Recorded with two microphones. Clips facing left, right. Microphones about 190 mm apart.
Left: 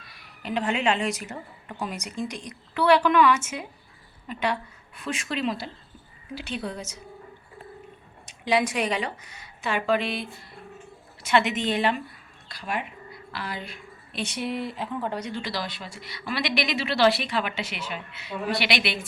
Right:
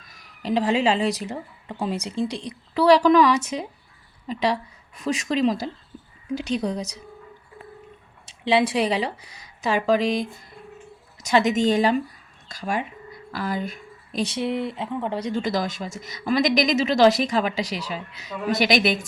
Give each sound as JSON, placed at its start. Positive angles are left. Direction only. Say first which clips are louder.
{"t": 0.0, "sound": "speech", "louder": "right 6 dB", "side_deg": -40}
{"t": 8.3, "sound": "speech", "louder": "right 4 dB", "side_deg": -30}
{"t": 13.3, "sound": "speech", "louder": "right 8 dB", "side_deg": -45}
{"t": 15.3, "sound": "a woman's voice", "louder": "right 7 dB", "side_deg": -50}